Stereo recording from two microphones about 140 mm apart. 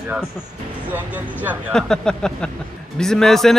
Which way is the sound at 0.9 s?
10° right (ahead or behind).